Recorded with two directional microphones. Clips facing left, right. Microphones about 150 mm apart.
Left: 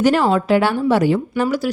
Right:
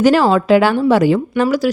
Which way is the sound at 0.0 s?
90° right.